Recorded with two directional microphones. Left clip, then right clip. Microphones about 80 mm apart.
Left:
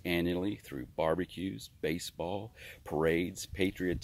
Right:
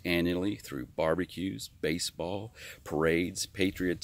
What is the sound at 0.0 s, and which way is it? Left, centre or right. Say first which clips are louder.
Speech: right 3 dB; right.